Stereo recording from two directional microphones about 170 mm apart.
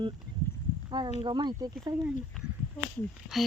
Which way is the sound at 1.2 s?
25° right (ahead or behind).